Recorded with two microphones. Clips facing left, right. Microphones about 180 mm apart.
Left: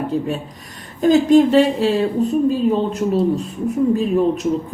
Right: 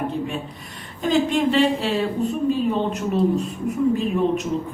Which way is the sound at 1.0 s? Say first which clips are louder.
Left 8 dB; 40° left (ahead or behind).